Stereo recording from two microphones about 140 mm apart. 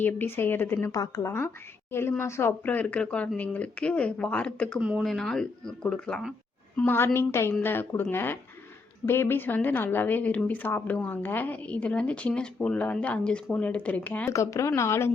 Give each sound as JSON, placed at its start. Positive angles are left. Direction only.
{"t": 0.0, "sound": "a woman's voice", "side_deg": 15}
{"t": 4.8, "sound": "speech", "side_deg": -5}
{"t": 5.1, "sound": "a woman's voice", "side_deg": 5}